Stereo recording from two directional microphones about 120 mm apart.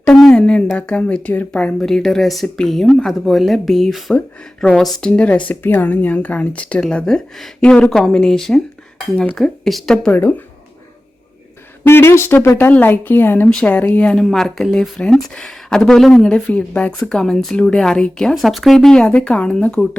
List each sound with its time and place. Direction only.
0.0 s a sound: 5° left (ahead or behind)
0.8 s speech: 10° left (ahead or behind)
11.8 s speech: 20° left (ahead or behind)